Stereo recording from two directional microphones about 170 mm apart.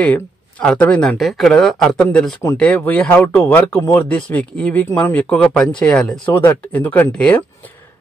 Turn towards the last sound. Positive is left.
turn(degrees=10)  # may be behind; listen again after turning